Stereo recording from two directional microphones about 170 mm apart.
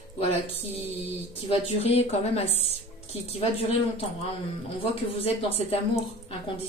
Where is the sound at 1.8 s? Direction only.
35° left (ahead or behind).